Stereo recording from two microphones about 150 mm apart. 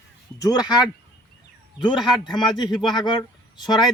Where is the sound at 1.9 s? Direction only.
Centre (ahead or behind).